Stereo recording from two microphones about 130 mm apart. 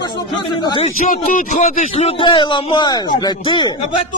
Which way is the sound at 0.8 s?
75° left (ahead or behind).